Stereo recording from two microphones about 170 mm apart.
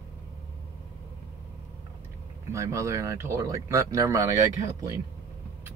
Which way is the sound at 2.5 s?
20° right (ahead or behind).